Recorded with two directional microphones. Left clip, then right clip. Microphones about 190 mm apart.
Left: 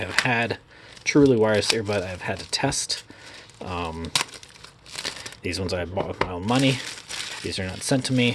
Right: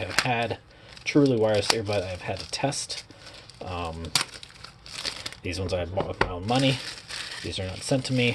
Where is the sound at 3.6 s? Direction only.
25° left (ahead or behind).